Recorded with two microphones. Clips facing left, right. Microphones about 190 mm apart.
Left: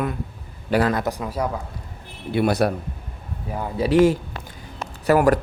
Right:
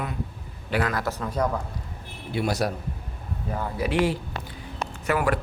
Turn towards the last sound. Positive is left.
turn(degrees=40)  # may be behind; listen again after turning